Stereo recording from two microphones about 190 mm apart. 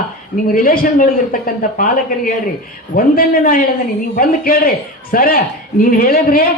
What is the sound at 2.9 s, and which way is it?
Speech, 50° left (ahead or behind).